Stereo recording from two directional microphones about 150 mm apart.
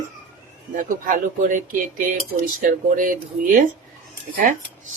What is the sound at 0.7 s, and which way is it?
Speech, 60° right (ahead or behind).